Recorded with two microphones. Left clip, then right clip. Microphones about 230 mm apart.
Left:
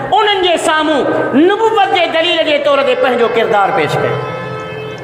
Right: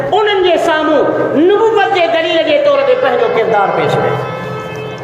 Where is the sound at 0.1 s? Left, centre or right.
Left.